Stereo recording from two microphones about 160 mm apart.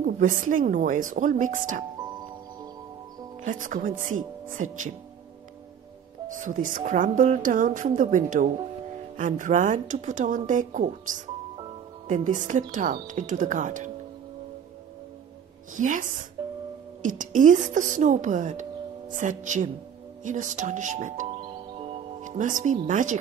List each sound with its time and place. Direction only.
0.0 s speech: 55° right (ahead or behind)
3.4 s speech: 55° right (ahead or behind)
6.2 s speech: 55° right (ahead or behind)
15.7 s speech: 55° right (ahead or behind)
16.4 s music: 30° right (ahead or behind)
17.0 s speech: 55° right (ahead or behind)
21.4 s music: 35° right (ahead or behind)
22.2 s speech: 50° right (ahead or behind)